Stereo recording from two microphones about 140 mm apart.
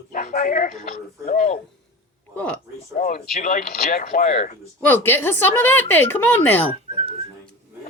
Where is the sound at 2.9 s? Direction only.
65° left (ahead or behind).